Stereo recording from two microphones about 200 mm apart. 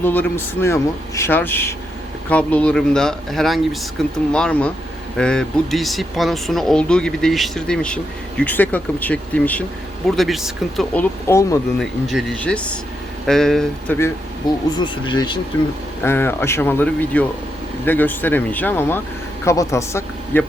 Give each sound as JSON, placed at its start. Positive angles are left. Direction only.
{"t": 0.0, "sound": "speech", "side_deg": 10}
{"t": 11.3, "sound": "speech", "side_deg": 15}
{"t": 11.8, "sound": "speech", "side_deg": 0}
{"t": 14.4, "sound": "speech", "side_deg": 20}
{"t": 16.0, "sound": "a man's voice", "side_deg": 10}